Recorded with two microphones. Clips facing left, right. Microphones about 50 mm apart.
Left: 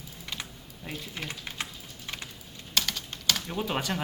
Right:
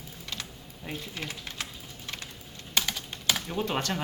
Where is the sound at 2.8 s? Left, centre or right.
Centre.